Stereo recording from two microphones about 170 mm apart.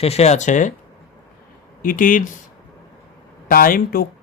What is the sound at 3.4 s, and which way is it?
Speech, 55° left (ahead or behind).